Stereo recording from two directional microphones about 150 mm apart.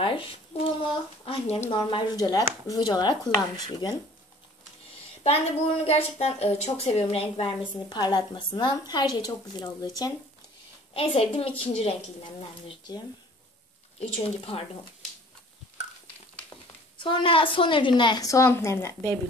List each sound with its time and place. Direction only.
0.0 s a child's voice: 35° left (ahead or behind)
5.2 s a woman's voice: 45° left (ahead or behind)
10.9 s a woman's voice: 40° left (ahead or behind)
17.0 s a woman's voice: 35° left (ahead or behind); by 19.1 s 20° left (ahead or behind)